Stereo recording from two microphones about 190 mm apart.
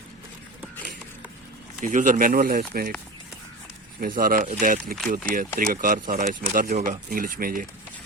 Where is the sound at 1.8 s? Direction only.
45° right (ahead or behind).